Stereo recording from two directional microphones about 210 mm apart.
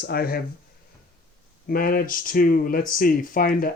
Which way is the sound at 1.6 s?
45° left (ahead or behind).